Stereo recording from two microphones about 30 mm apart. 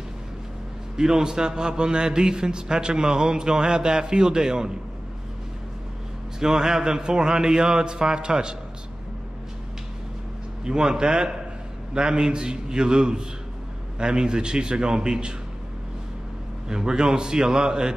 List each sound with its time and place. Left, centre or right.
0.9 s a man's voice: centre
6.4 s a man's voice: centre
10.6 s a man's voice: right
16.6 s a man's voice: right